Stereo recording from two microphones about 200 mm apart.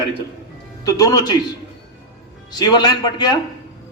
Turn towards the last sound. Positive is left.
turn(degrees=20)  # may be behind; listen again after turning